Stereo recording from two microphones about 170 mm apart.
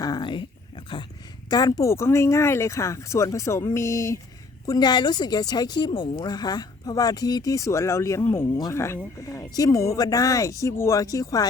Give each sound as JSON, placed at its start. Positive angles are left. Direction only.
{"t": 0.0, "sound": "dog", "side_deg": 25}
{"t": 1.5, "sound": "speech", "side_deg": 20}